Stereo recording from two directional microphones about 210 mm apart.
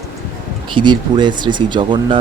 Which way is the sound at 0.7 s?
20° right (ahead or behind).